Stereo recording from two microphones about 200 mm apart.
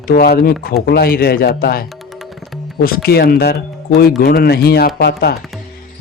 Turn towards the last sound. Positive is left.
turn(degrees=50)  # may be behind; listen again after turning